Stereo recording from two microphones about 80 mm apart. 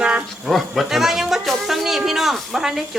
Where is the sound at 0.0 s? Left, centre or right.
Centre.